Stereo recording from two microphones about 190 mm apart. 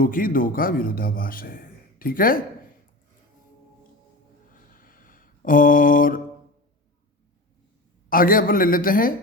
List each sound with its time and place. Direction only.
0.0 s a man's voice: 45° left (ahead or behind)
4.7 s mantra: 45° left (ahead or behind)
8.1 s a man's voice: 50° left (ahead or behind)